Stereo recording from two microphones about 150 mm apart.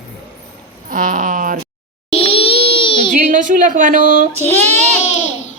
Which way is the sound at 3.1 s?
60° right (ahead or behind).